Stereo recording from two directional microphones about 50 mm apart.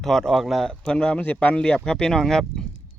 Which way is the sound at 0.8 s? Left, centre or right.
Centre.